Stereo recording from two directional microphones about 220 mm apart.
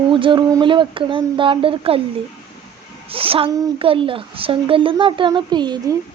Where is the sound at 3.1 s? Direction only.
25° right (ahead or behind).